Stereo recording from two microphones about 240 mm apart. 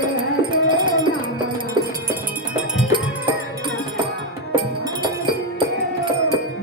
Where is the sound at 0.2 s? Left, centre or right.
Centre.